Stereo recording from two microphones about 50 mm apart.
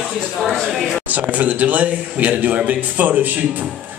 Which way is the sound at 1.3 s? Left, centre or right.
Right.